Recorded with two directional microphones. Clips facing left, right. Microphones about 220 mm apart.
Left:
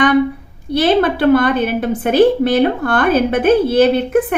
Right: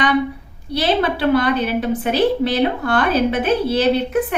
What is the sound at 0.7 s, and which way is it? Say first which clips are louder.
A woman's voice: left 5 dB; 50° left (ahead or behind).